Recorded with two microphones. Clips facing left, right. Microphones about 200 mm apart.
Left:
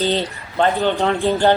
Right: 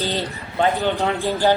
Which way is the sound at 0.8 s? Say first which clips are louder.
Left 3 dB; 15° left (ahead or behind).